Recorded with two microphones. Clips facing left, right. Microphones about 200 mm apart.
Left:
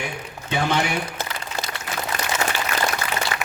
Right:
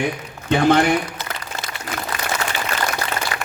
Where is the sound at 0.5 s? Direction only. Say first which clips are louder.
Right 7 dB; 55° right (ahead or behind).